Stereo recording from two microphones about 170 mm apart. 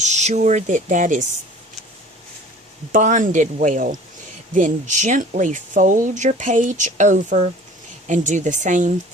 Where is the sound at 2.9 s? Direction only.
50° right (ahead or behind).